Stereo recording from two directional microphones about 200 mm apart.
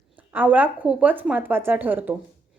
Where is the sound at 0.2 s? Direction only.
10° right (ahead or behind).